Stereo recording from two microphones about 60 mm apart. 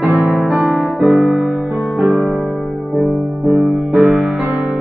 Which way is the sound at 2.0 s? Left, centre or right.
Right.